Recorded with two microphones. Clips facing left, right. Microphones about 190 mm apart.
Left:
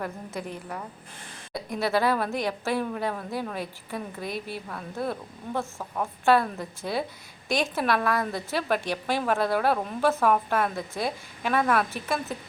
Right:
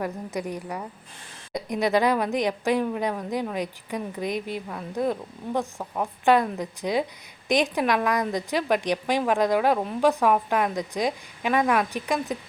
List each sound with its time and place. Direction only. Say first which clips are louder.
0.0 s a woman's voice: right 4 dB; 15° right (ahead or behind)